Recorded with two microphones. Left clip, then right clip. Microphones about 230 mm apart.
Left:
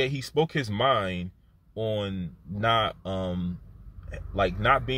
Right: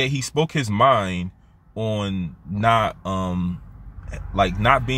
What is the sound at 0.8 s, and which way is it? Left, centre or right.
Speech, centre.